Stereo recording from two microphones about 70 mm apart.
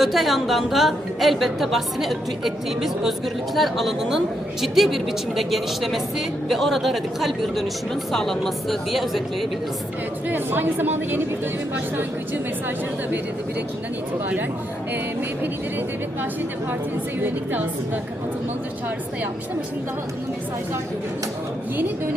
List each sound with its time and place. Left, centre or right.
0.0 s a woman's voice: centre
10.2 s a woman's voice: right
17.2 s a woman's voice: right